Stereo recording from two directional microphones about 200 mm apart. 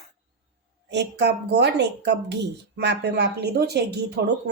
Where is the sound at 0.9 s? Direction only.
55° right (ahead or behind).